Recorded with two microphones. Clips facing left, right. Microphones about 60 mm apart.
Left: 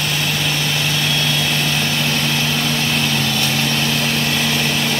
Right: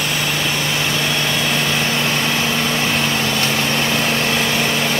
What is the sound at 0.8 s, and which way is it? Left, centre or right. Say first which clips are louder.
Vehicle: right 1 dB; right.